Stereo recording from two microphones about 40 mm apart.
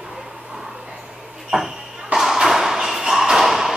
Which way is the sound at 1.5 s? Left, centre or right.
Right.